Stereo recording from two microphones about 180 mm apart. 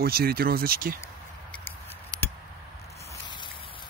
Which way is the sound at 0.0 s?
60° right (ahead or behind).